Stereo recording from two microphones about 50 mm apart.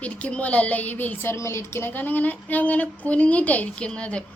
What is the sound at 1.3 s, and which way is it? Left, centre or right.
Speech, left.